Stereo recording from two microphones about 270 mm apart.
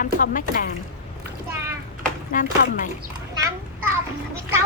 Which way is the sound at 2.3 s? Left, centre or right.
Left.